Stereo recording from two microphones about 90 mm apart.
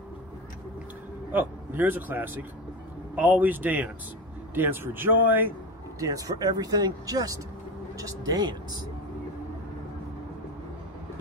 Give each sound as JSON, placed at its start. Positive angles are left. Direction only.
{"t": 1.3, "sound": "speech", "side_deg": -20}
{"t": 5.9, "sound": "speech", "side_deg": -40}